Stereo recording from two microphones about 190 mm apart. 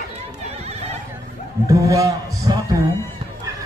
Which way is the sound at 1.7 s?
15° right (ahead or behind).